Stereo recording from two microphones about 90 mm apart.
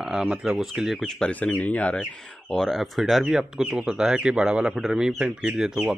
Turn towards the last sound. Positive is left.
turn(degrees=-10)  # may be behind; listen again after turning